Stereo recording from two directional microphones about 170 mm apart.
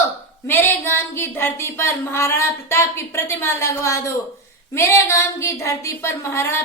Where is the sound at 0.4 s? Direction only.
15° left (ahead or behind).